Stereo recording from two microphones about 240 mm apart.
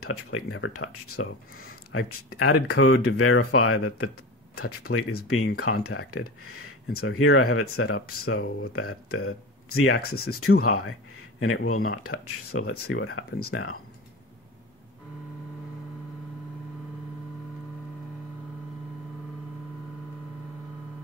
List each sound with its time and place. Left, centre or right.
0.0 s speech: left
8.4 s speech: left
8.7 s speech: left